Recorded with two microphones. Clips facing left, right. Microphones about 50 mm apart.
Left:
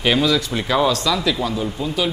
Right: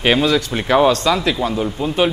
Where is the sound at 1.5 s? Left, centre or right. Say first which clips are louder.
Right 3 dB; right.